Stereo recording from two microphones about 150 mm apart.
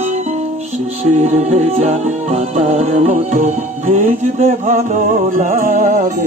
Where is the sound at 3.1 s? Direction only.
60° right (ahead or behind).